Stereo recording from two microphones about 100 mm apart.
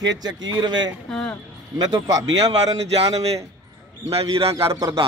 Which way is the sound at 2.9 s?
90° right.